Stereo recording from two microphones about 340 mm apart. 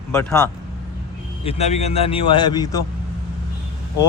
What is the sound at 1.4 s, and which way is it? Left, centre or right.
Speech, centre.